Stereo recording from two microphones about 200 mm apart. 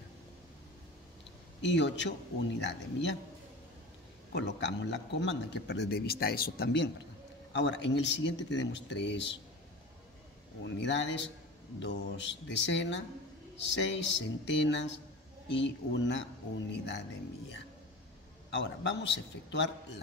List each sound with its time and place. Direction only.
1.6 s a man's voice: 60° left (ahead or behind)
4.3 s a man's voice: 60° left (ahead or behind)
10.6 s a man's voice: 60° left (ahead or behind)
18.5 s a man's voice: 65° left (ahead or behind)